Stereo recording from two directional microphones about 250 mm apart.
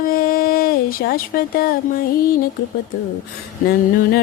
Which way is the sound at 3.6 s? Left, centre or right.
Left.